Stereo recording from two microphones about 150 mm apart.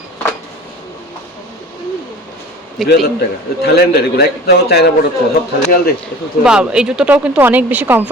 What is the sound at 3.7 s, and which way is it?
A man's voice, 90° left.